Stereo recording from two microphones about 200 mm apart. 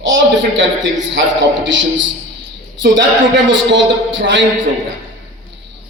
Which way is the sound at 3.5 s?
65° right (ahead or behind).